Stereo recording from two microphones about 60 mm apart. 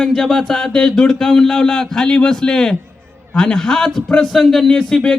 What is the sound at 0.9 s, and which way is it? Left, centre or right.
A man's voice, centre.